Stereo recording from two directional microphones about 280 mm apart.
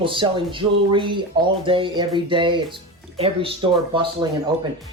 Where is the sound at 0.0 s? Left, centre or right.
Centre.